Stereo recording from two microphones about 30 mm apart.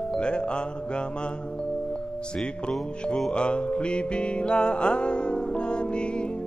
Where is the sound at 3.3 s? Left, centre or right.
Left.